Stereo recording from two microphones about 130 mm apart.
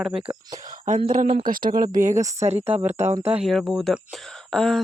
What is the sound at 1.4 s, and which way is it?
Speech, 90° right.